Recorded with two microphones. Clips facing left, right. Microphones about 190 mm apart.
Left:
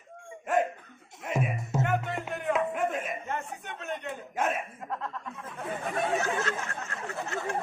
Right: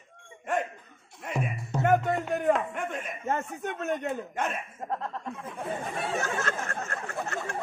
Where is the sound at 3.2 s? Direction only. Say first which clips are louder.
Right 5 dB; 45° right (ahead or behind).